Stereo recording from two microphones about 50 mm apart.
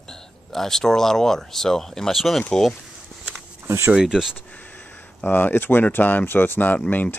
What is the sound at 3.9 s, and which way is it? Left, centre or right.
Speech, centre.